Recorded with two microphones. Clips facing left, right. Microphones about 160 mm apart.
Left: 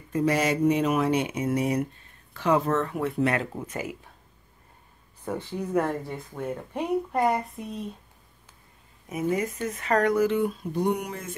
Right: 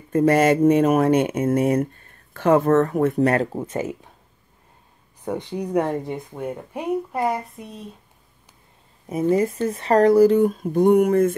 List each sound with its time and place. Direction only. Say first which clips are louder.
0.1 s speech: right 8 dB; 50° right (ahead or behind)
3.6 s speech: right 7 dB; 30° right (ahead or behind)
5.2 s speech: right 4 dB; 15° right (ahead or behind); by 7.8 s centre (ahead or behind)
9.3 s speech: right 9 dB; 30° right (ahead or behind); by 11.3 s 55° right (ahead or behind)